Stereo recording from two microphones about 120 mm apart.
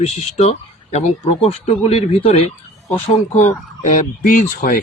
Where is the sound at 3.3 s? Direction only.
80° left.